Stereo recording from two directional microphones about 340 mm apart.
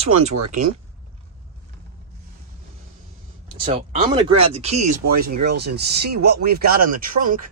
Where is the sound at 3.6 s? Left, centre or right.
Centre.